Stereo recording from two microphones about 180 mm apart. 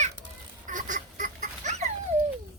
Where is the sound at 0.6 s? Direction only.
45° right (ahead or behind).